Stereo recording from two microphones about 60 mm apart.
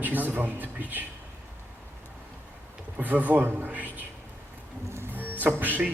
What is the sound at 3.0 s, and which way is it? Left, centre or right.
Speech, right.